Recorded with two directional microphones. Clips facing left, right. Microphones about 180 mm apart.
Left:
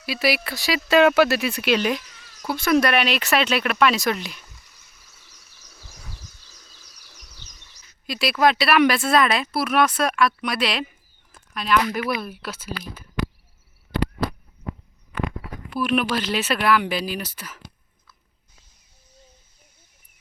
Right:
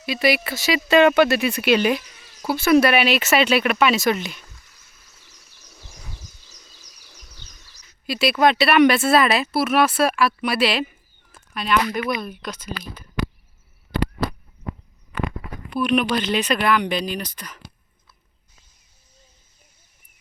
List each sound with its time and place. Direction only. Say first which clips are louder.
0.0 s speech: right 3 dB; 5° left (ahead or behind)
5.8 s a sound: right 1 dB; 20° right (ahead or behind)
7.6 s speech: right 5 dB; centre (ahead or behind)
15.7 s speech: right 2 dB; centre (ahead or behind)